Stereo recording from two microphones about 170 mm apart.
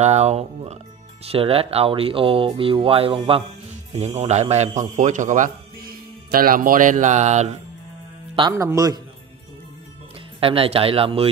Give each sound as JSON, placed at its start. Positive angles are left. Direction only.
{"t": 0.0, "sound": "speech", "side_deg": -40}
{"t": 8.5, "sound": "a man's voice", "side_deg": -20}
{"t": 10.4, "sound": "speech", "side_deg": -35}